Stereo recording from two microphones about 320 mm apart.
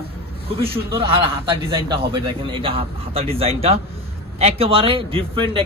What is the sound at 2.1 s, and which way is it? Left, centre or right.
A man's voice, centre.